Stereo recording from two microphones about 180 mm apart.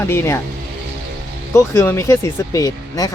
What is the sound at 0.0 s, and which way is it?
Speech, 15° left (ahead or behind).